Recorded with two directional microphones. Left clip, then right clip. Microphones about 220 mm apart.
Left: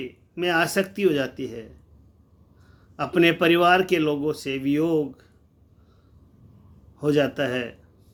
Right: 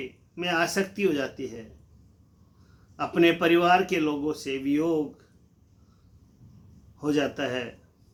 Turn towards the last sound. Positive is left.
turn(degrees=45)  # may be behind; listen again after turning